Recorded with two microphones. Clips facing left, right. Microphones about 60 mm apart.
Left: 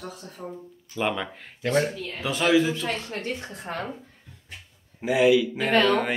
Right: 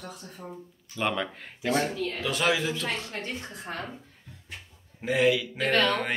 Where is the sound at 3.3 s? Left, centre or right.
Left.